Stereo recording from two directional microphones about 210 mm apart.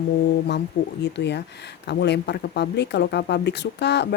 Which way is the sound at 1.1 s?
55° left (ahead or behind).